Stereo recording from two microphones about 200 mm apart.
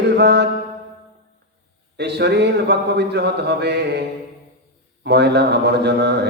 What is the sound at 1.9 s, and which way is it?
A man's voice, 55° right (ahead or behind).